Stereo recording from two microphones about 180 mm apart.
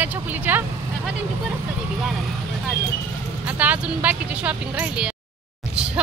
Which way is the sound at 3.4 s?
10° right (ahead or behind).